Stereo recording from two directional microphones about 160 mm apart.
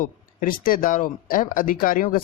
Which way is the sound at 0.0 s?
60° left (ahead or behind).